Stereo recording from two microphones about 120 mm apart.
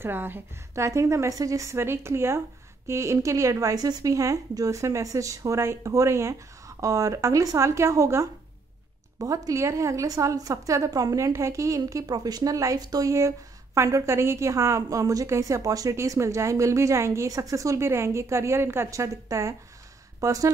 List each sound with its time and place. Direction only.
0.0 s a woman's voice: 15° right (ahead or behind)